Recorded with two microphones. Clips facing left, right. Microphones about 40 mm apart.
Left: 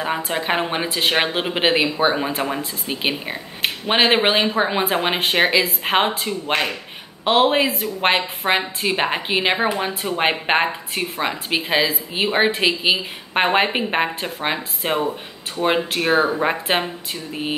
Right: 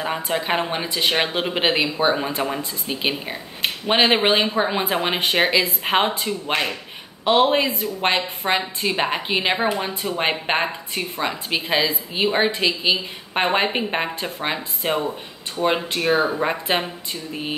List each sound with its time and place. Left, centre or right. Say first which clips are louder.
0.0 s a woman's voice: left 1 dB; centre
0.7 s speech: left 2 dB; left
0.9 s a woman's voice: left 1 dB; centre
16.3 s a woman's voice: left 2 dB; centre